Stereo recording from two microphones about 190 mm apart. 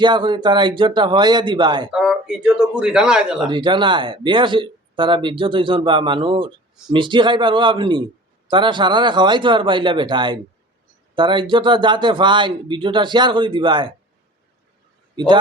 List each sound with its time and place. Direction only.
0.0 s a man's voice: 25° right (ahead or behind)
1.9 s speech: 5° right (ahead or behind)
3.4 s a man's voice: 25° right (ahead or behind)